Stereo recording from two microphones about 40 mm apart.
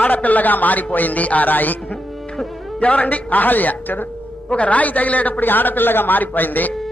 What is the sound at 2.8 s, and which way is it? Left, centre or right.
Speech, left.